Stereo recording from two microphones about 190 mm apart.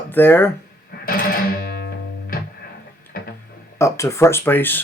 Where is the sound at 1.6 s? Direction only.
55° left (ahead or behind).